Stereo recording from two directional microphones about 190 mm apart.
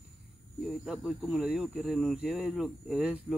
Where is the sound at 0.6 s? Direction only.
Centre (ahead or behind).